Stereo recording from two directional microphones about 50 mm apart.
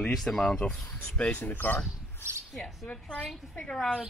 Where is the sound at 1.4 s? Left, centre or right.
Left.